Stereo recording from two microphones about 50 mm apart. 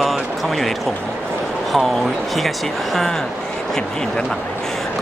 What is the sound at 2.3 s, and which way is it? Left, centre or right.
Speech, centre.